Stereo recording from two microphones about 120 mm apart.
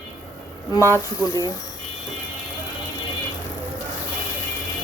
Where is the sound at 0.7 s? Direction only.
25° left (ahead or behind).